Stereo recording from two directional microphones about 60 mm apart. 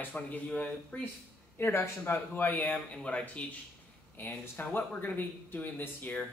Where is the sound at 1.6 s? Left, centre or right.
Left.